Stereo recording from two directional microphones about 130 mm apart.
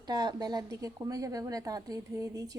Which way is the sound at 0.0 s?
30° right (ahead or behind).